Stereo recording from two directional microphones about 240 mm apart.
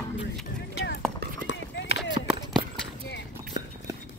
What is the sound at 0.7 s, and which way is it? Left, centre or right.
Clip-clop, left.